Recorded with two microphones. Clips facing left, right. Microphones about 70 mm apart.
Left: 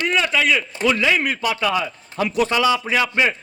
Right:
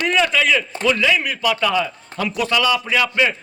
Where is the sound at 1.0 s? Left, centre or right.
Left.